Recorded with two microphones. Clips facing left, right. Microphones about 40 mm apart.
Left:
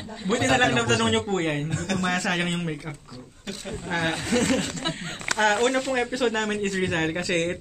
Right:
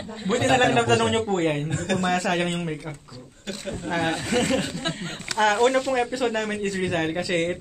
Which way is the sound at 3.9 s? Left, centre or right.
Centre.